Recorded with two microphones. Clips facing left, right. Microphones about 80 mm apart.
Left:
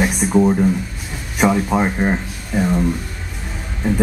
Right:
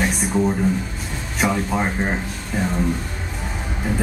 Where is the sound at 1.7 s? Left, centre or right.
Centre.